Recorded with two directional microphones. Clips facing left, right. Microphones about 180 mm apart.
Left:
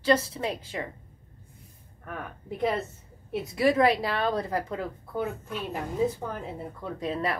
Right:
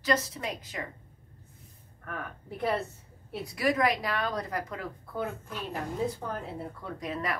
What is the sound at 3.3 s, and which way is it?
Speech, 20° left (ahead or behind).